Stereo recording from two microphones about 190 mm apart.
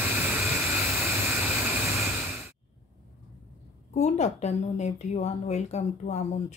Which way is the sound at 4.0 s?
35° left (ahead or behind).